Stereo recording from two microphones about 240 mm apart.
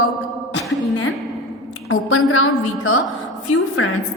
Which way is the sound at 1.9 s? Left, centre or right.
Left.